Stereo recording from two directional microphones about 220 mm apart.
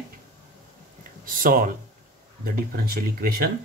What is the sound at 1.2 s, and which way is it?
Speech, 40° right (ahead or behind).